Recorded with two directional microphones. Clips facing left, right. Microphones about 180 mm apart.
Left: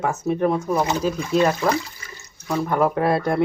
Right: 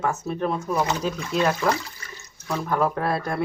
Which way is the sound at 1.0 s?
5° left (ahead or behind).